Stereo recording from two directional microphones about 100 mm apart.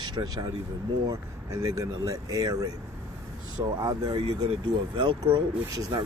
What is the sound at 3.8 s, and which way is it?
Speech, 45° right (ahead or behind).